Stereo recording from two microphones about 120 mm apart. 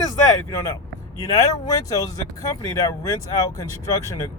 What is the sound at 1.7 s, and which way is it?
Speech, 30° left (ahead or behind).